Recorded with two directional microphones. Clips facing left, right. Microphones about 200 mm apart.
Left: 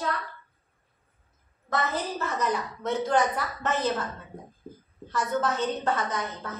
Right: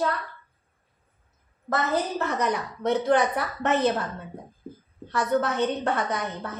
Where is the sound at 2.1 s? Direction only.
65° right (ahead or behind).